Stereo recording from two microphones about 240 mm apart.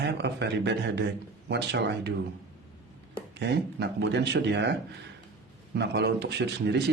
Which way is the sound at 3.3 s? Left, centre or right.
Right.